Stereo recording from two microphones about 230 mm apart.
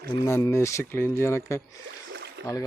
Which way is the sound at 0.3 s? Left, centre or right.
Centre.